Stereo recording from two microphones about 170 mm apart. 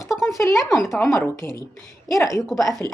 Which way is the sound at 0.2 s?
Centre (ahead or behind).